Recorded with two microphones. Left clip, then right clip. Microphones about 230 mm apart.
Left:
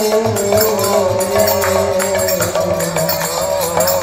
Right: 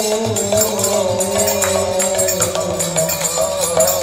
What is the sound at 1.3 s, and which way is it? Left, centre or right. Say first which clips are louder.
Music: left 4 dB; right.